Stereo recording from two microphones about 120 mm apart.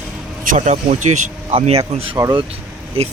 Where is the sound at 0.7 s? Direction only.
85° right.